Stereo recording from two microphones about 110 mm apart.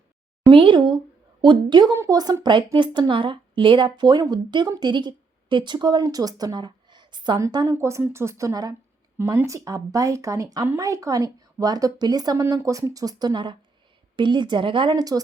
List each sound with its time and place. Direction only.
0.5 s a woman's voice: 50° right (ahead or behind)
1.9 s speech: 30° right (ahead or behind)
2.4 s a woman's voice: 45° right (ahead or behind)
7.8 s a woman's voice: 25° right (ahead or behind); by 14.9 s 50° right (ahead or behind)
14.9 s speech: 35° right (ahead or behind)